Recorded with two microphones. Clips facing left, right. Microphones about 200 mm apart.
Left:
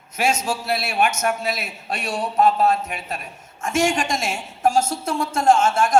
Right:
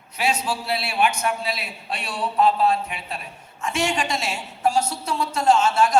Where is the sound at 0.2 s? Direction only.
45° left (ahead or behind).